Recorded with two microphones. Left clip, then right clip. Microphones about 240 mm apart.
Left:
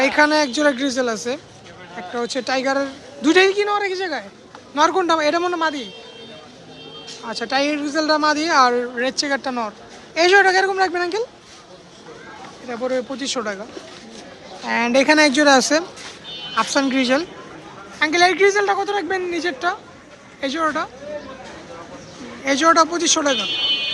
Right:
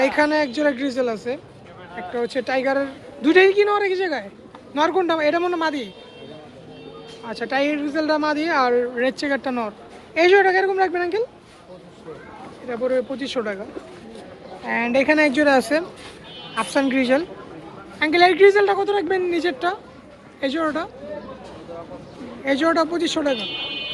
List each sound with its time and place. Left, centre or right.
0.0 s speech: centre
7.3 s speech: centre
12.6 s speech: centre
14.6 s a man's voice: centre
22.4 s a man's voice: centre